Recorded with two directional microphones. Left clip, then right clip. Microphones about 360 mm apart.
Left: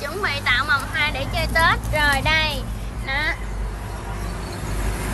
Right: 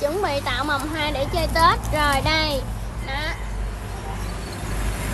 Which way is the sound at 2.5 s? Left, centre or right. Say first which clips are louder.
Right 2 dB; centre.